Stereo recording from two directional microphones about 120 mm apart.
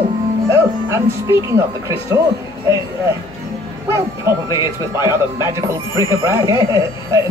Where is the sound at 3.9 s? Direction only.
25° right (ahead or behind).